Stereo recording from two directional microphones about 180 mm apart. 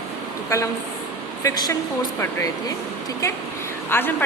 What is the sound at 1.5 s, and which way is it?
A woman's voice, 20° left (ahead or behind).